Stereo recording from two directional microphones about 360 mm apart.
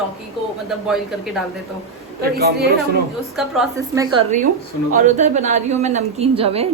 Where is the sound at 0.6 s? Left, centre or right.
Centre.